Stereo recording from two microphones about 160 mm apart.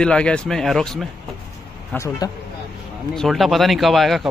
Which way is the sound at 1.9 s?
20° left (ahead or behind).